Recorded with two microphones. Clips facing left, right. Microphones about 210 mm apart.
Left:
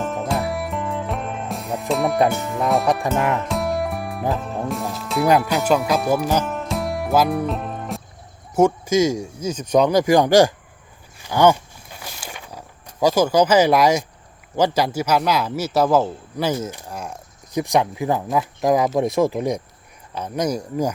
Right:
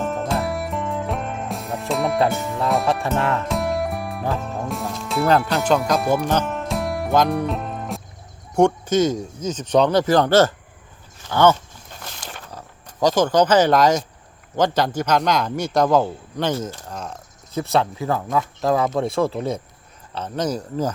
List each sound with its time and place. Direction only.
0.0 s music: centre (ahead or behind)
2.3 s speech: centre (ahead or behind)
2.8 s a man's voice: 15° left (ahead or behind)
3.5 s music: centre (ahead or behind)
4.3 s a man's voice: centre (ahead or behind)
11.2 s a sound: 15° left (ahead or behind)
14.5 s a man's voice: 10° left (ahead or behind)